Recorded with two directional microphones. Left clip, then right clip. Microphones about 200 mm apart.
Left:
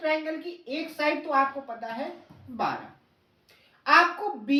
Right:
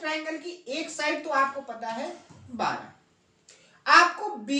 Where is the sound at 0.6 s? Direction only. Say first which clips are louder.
Left 2 dB; 15° right (ahead or behind).